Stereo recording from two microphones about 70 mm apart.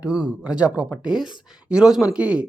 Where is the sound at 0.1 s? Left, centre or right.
Centre.